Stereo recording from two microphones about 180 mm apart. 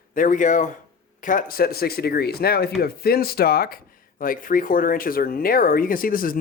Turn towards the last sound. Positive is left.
turn(degrees=50)  # may be behind; listen again after turning